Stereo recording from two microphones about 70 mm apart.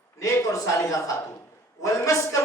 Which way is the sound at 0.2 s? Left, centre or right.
Left.